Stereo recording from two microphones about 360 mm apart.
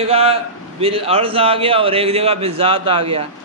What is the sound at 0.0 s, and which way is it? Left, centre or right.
A man's voice, centre.